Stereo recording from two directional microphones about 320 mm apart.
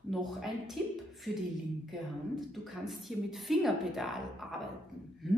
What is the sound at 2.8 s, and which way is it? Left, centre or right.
A woman's voice, centre.